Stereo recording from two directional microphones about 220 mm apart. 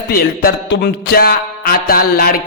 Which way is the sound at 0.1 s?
45° left (ahead or behind).